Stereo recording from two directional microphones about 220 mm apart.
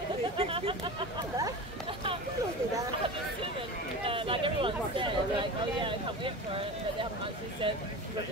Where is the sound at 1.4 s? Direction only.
25° right (ahead or behind).